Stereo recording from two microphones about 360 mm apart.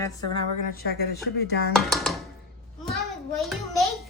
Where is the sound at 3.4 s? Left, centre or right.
Centre.